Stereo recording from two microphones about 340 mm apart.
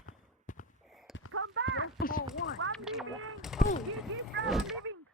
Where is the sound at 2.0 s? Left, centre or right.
Left.